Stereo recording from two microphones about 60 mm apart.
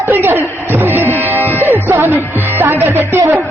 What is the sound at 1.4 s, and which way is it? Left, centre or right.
Music, left.